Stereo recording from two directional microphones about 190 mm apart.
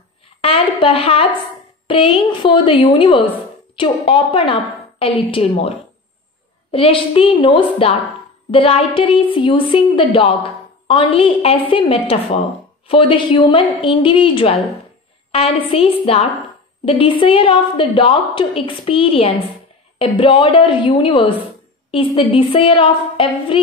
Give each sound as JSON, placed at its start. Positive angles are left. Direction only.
{"t": 0.4, "sound": "a woman's voice", "side_deg": 30}